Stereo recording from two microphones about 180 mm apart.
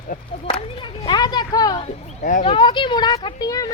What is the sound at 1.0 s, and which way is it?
Speech, 25° left (ahead or behind).